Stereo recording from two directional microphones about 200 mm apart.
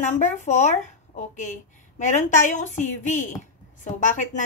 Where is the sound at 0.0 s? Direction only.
35° left (ahead or behind).